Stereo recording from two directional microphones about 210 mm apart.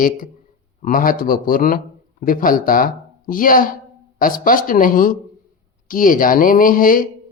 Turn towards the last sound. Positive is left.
turn(degrees=40)  # may be behind; listen again after turning